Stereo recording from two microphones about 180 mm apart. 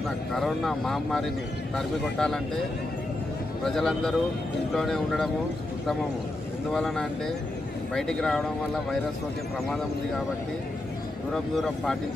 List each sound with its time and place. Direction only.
0.3 s speech: centre (ahead or behind)
3.6 s speech: 5° left (ahead or behind)
6.7 s speech: centre (ahead or behind)
11.3 s speech: 5° left (ahead or behind)